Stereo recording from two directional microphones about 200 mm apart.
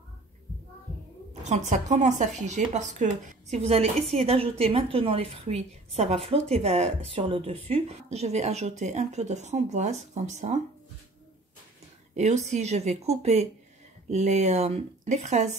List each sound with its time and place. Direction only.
1.4 s a woman's voice: 35° right (ahead or behind)
12.1 s speech: 35° right (ahead or behind)